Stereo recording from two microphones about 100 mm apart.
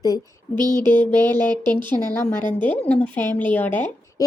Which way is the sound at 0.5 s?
45° right (ahead or behind).